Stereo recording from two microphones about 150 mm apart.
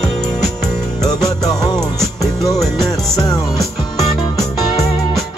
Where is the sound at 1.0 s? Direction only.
25° left (ahead or behind).